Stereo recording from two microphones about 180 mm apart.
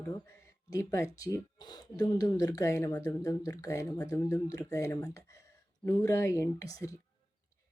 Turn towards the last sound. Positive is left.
turn(degrees=20)  # may be behind; listen again after turning